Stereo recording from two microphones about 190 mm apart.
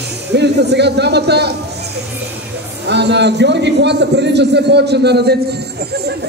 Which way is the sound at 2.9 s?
65° right (ahead or behind).